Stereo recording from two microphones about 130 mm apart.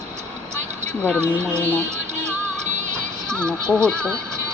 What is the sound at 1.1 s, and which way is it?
Speech, 20° right (ahead or behind).